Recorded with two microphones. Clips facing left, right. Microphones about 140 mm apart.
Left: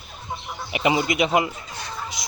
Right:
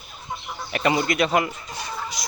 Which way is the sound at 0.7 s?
15° left (ahead or behind).